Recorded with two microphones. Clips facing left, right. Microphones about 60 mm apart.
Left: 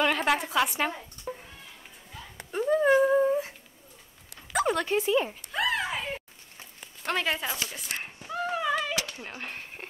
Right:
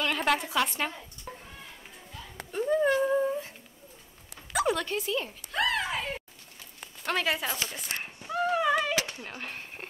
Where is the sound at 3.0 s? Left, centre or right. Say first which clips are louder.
Left 4 dB; centre.